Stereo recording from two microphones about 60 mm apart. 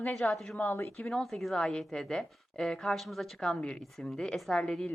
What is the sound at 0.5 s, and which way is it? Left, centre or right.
Speech, left.